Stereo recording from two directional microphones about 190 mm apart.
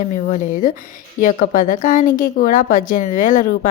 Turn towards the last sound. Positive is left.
turn(degrees=45)  # may be behind; listen again after turning